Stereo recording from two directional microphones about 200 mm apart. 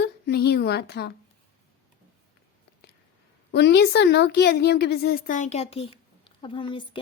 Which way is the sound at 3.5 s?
60° left (ahead or behind).